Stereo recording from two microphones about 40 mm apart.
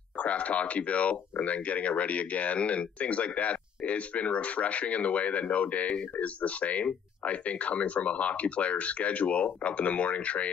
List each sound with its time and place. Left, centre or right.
0.2 s speech: left